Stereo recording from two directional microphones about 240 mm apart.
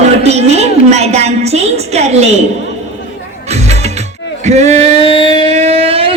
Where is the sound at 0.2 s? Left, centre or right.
Right.